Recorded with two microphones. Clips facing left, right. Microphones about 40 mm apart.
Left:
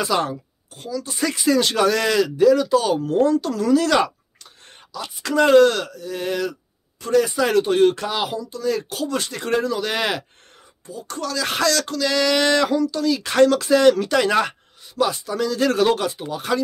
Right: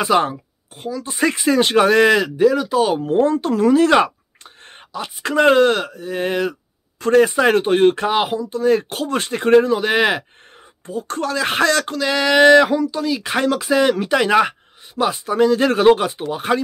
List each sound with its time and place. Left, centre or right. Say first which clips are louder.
0.0 s speech: right 5 dB; right
7.0 s speech: right 5 dB; right
10.9 s speech: right 5 dB; right